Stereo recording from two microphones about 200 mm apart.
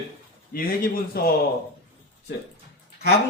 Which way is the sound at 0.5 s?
45° left (ahead or behind).